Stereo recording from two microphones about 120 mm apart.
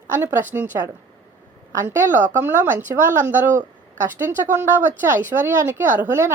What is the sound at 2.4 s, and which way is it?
A woman's voice, 15° right (ahead or behind).